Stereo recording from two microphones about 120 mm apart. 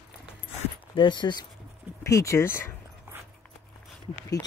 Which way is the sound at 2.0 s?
25° left (ahead or behind).